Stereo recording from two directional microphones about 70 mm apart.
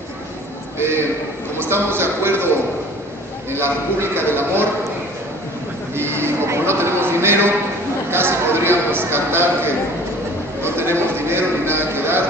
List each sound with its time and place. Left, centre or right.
1.6 s speech: right
3.5 s speech: right
5.9 s speech: right
8.1 s a sound: right
10.6 s music: right